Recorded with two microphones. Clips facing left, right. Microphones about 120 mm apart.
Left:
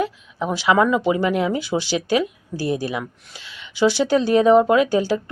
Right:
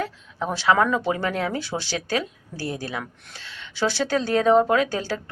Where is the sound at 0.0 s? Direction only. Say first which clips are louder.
Left 4 dB; 10° left (ahead or behind).